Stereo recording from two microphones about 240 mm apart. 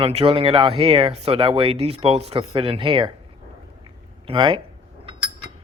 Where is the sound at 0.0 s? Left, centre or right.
Right.